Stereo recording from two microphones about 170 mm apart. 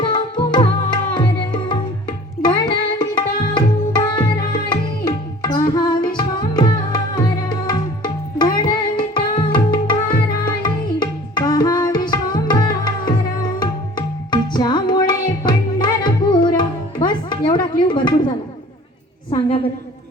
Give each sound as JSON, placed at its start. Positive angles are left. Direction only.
{"t": 0.0, "sound": "tabla", "side_deg": 30}
{"t": 2.4, "sound": "music", "side_deg": 25}
{"t": 3.2, "sound": "tabla", "side_deg": 25}
{"t": 4.7, "sound": "music", "side_deg": 25}
{"t": 19.3, "sound": "a sound", "side_deg": 30}